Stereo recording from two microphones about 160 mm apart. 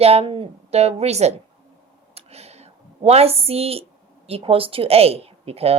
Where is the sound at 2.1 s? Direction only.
40° right (ahead or behind).